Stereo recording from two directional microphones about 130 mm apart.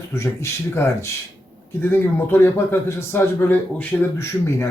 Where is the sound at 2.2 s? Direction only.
15° left (ahead or behind).